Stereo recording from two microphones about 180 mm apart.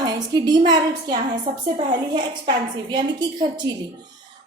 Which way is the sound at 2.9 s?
25° right (ahead or behind).